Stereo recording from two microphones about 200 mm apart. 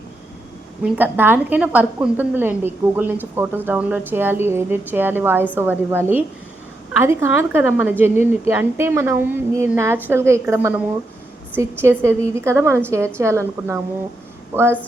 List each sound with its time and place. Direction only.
0.9 s a woman's voice: 10° right (ahead or behind)